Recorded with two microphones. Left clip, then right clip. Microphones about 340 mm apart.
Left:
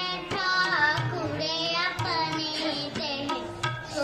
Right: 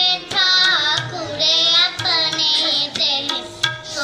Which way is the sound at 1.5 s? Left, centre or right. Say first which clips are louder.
Right 15 dB; right.